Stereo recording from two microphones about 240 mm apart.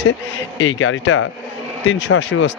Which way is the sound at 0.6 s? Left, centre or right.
Left.